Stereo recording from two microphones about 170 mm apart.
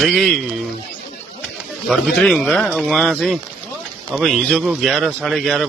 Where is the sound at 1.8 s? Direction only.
Centre (ahead or behind).